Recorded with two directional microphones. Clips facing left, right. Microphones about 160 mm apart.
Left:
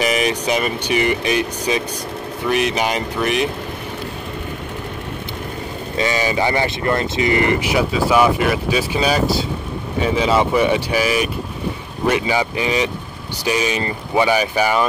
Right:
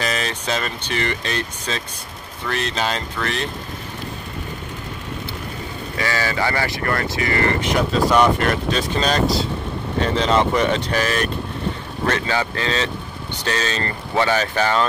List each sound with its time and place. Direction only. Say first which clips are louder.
0.0 s speech: left 6 dB; 15° left (ahead or behind)
5.9 s speech: left 4 dB; 20° left (ahead or behind)